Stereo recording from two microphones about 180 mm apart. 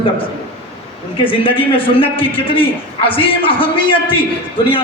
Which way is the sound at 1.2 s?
30° left (ahead or behind).